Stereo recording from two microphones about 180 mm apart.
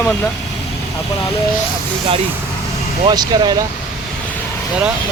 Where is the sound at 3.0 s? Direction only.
25° right (ahead or behind).